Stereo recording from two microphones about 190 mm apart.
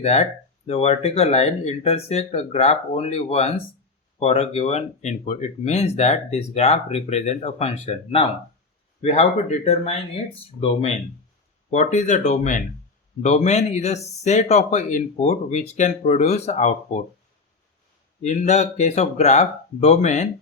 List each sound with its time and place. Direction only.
0.0 s speech: 35° left (ahead or behind)
18.2 s speech: 35° left (ahead or behind)